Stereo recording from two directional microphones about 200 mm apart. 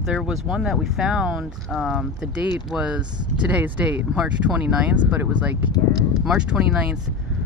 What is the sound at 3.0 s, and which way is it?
Speech, 20° right (ahead or behind).